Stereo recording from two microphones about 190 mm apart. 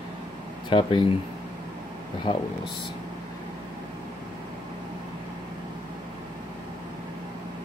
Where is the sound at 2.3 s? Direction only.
25° left (ahead or behind).